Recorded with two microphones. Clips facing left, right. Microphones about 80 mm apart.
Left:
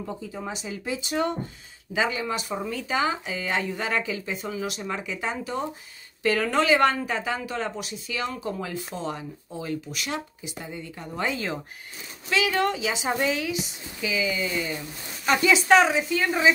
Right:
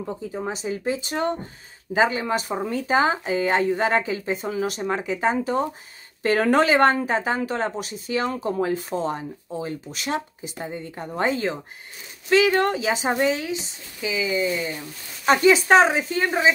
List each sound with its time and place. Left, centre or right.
0.3 s speech: right
15.2 s speech: right